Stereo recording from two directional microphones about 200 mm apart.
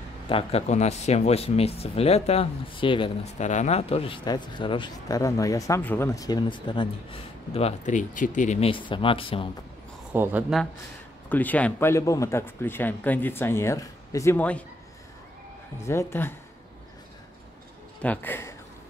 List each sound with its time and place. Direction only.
0.3 s speech: 30° left (ahead or behind)
3.4 s speech: 35° left (ahead or behind)
10.1 s speech: 10° right (ahead or behind)
11.2 s speech: 10° left (ahead or behind)
15.8 s speech: 15° left (ahead or behind)
18.0 s speech: 10° left (ahead or behind)